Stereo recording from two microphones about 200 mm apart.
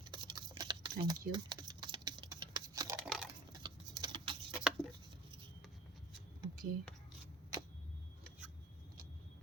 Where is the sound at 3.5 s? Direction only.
20° right (ahead or behind).